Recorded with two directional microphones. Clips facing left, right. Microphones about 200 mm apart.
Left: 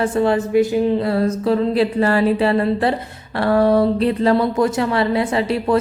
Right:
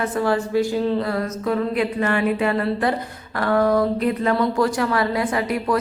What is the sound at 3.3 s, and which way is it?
A woman's voice, 30° left (ahead or behind).